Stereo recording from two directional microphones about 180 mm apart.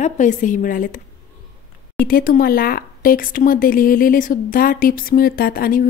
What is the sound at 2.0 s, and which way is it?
Speech, 50° left (ahead or behind).